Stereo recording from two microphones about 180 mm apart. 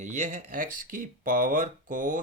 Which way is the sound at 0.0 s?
45° right (ahead or behind).